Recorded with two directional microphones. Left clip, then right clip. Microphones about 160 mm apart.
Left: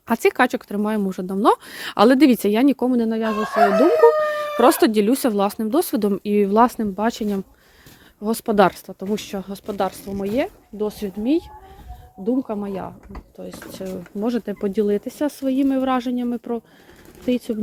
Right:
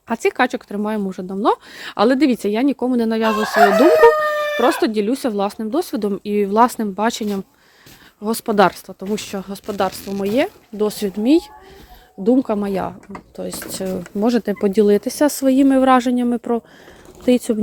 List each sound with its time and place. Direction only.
0.1 s speech: 20° left (ahead or behind)
2.9 s speech: centre (ahead or behind)
4.2 s speech: 20° left (ahead or behind); by 10.2 s 10° right (ahead or behind)
10.2 s speech: 20° right (ahead or behind)
10.8 s speech: 35° right (ahead or behind)
12.2 s speech: 45° right (ahead or behind); by 17.6 s 15° right (ahead or behind)